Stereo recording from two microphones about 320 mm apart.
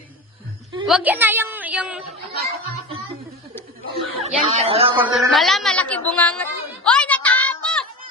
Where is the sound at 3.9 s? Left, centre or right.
Centre.